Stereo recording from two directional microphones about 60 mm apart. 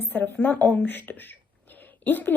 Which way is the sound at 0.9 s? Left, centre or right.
Left.